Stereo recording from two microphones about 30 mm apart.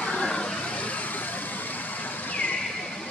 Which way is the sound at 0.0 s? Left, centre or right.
Left.